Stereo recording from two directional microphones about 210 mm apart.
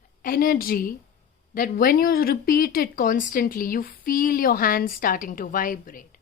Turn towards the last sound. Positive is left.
turn(degrees=40)  # may be behind; listen again after turning